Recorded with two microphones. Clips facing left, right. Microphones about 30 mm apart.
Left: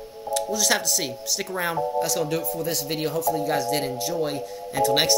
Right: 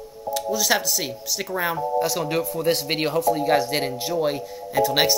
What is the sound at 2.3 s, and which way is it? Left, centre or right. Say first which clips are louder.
Speech: right 4 dB; right.